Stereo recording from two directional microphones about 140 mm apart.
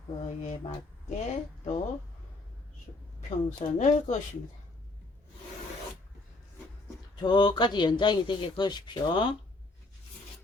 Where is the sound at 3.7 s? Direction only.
55° left (ahead or behind).